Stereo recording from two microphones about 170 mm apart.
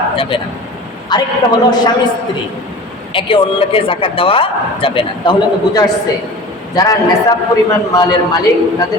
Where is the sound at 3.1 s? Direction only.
30° left (ahead or behind).